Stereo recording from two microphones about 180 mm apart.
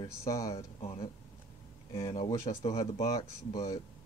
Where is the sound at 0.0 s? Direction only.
20° left (ahead or behind).